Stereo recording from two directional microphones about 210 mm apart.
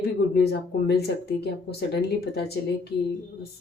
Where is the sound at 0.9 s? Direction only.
50° left (ahead or behind).